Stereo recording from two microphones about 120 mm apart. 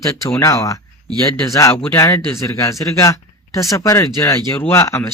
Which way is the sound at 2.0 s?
25° left (ahead or behind).